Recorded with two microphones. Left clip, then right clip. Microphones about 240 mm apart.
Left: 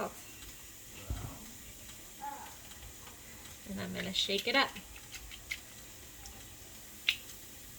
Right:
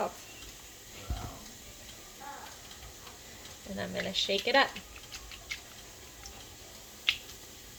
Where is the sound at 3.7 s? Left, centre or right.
Left.